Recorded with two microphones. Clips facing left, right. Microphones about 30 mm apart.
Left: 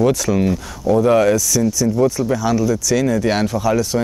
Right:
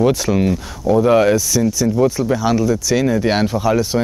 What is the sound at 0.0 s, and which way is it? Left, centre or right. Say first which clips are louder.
Speech: right 1 dB; centre.